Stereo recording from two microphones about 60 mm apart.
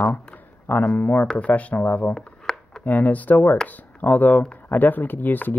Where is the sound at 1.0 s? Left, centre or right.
Left.